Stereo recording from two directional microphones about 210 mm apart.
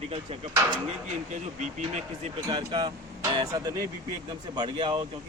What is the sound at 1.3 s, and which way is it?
Speech, 35° right (ahead or behind).